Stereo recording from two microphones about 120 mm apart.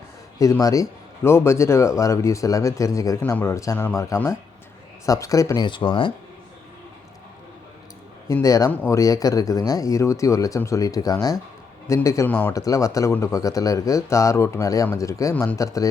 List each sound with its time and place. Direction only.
0.6 s a man's voice: 30° left (ahead or behind)
3.2 s a man's voice: 15° left (ahead or behind)
5.6 s speech: 45° left (ahead or behind)
8.3 s a man's voice: 30° left (ahead or behind)